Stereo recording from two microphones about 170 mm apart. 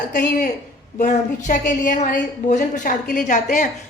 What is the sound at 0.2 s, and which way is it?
A woman's voice, 55° left (ahead or behind).